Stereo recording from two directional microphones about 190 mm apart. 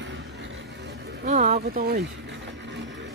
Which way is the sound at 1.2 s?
40° right (ahead or behind).